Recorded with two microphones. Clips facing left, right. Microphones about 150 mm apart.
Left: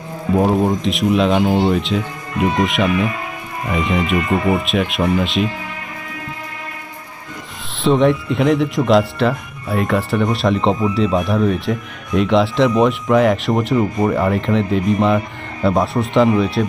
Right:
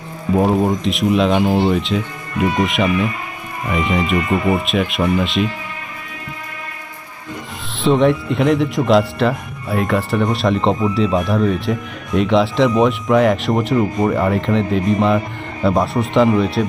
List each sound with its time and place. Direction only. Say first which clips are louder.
0.3 s speech: even; centre (ahead or behind)
7.8 s speech: even; centre (ahead or behind)